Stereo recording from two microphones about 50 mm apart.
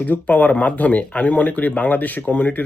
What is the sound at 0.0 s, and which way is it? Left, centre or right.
Speech, left.